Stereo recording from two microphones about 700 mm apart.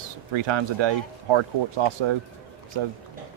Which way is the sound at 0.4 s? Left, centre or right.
Right.